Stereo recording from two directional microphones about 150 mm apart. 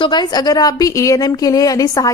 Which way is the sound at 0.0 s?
30° left (ahead or behind).